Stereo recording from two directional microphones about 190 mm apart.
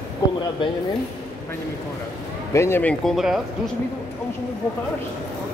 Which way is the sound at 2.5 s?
15° left (ahead or behind).